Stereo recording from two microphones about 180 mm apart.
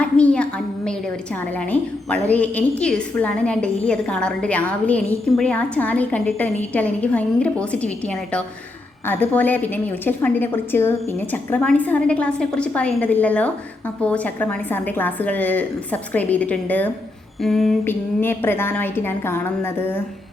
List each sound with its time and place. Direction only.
0.0 s a woman's voice: 5° left (ahead or behind)
17.8 s a woman's voice: 10° left (ahead or behind)